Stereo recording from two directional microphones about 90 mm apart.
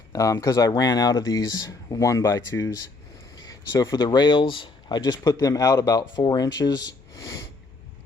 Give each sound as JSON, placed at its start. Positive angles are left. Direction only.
{"t": 0.1, "sound": "speech", "side_deg": 40}
{"t": 3.8, "sound": "speech", "side_deg": 50}